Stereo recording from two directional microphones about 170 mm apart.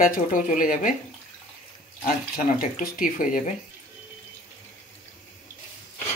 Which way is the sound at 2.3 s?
55° left (ahead or behind).